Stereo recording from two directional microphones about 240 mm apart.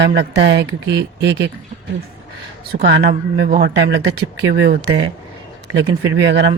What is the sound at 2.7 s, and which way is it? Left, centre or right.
Speech, right.